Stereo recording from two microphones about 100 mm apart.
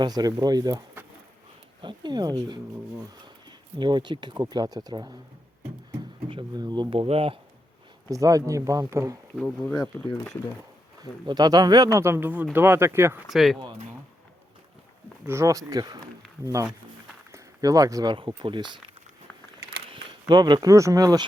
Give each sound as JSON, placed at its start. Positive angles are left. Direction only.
{"t": 0.0, "sound": "speech", "side_deg": -40}
{"t": 1.8, "sound": "speech", "side_deg": -50}
{"t": 6.5, "sound": "speech", "side_deg": -45}
{"t": 6.9, "sound": "speech", "side_deg": -70}
{"t": 8.1, "sound": "speech", "side_deg": -35}
{"t": 11.0, "sound": "speech", "side_deg": -40}
{"t": 13.2, "sound": "speech", "side_deg": 0}
{"t": 15.3, "sound": "speech", "side_deg": -30}
{"t": 17.3, "sound": "a sound", "side_deg": -35}
{"t": 18.1, "sound": "speech", "side_deg": -55}
{"t": 20.2, "sound": "speech", "side_deg": -45}